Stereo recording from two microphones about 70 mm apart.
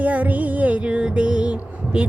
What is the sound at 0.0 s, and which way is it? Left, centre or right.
Music, right.